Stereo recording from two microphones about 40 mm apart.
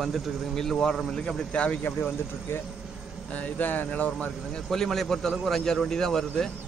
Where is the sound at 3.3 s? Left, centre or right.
Left.